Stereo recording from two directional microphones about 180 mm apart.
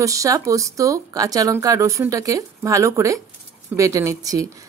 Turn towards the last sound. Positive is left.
turn(degrees=-20)  # may be behind; listen again after turning